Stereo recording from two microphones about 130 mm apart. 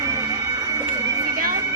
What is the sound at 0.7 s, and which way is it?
Bird, 25° right (ahead or behind).